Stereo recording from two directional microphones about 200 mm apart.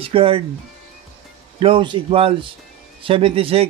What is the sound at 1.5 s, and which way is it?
Speech, 25° right (ahead or behind).